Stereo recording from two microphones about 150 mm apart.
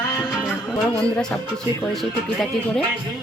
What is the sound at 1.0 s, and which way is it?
Speech, 5° left (ahead or behind).